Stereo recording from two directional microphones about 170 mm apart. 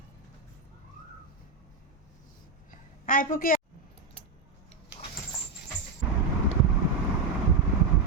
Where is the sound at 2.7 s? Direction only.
50° left (ahead or behind).